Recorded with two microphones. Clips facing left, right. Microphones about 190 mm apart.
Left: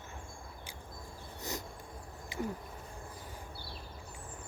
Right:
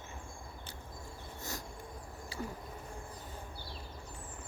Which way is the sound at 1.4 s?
20° left (ahead or behind).